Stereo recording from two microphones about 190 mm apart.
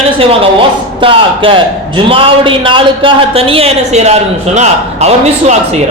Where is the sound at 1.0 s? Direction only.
25° right (ahead or behind).